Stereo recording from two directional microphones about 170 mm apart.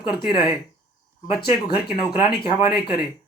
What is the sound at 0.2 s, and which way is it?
Speech, 30° left (ahead or behind).